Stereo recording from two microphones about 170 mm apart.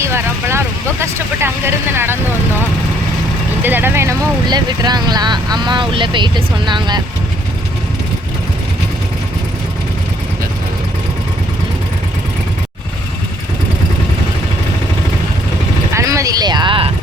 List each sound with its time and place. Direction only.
0.0 s vehicle: 15° right (ahead or behind)
3.6 s speech: 10° right (ahead or behind)
15.9 s clip-clop: 15° right (ahead or behind)